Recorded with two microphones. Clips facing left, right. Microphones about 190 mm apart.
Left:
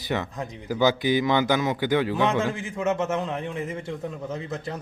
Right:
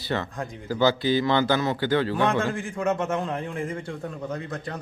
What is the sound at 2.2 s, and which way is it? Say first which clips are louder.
A man's voice: even; 5° left (ahead or behind).